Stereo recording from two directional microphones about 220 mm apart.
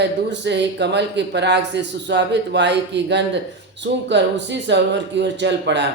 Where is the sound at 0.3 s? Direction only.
50° right (ahead or behind).